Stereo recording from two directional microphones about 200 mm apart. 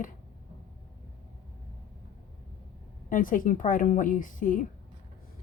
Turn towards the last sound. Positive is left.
turn(degrees=40)  # may be behind; listen again after turning